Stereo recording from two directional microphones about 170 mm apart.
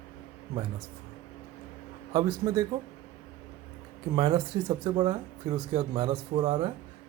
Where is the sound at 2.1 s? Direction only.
25° right (ahead or behind).